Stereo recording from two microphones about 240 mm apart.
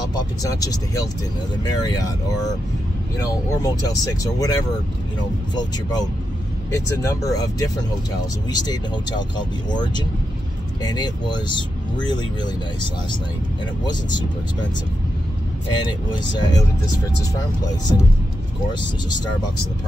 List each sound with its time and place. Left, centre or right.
0.1 s speech: centre
3.6 s speech: centre
16.1 s speech: centre